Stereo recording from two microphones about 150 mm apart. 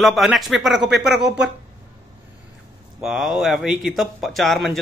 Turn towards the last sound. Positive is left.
turn(degrees=0)  # may be behind; listen again after turning